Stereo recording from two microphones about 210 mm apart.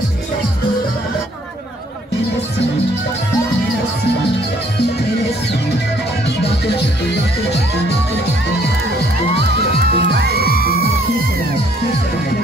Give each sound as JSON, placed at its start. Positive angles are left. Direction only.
{"t": 9.9, "sound": "music", "side_deg": -50}
{"t": 10.5, "sound": "music", "side_deg": 45}